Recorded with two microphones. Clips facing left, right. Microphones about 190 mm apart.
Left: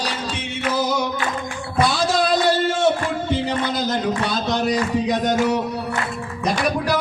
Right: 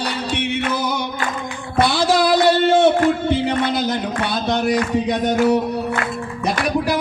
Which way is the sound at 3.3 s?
60° right (ahead or behind).